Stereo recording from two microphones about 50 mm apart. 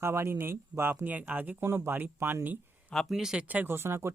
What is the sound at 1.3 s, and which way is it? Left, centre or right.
Speech, right.